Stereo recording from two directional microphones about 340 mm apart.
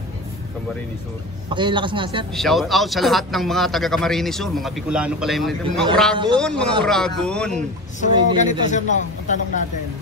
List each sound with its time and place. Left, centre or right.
1.5 s a man's voice: centre
2.3 s a man's voice: centre
6.1 s a man's voice: centre
6.4 s a man's voice: centre
8.0 s a man's voice: left